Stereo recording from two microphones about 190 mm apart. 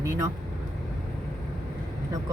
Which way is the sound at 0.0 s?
15° right (ahead or behind).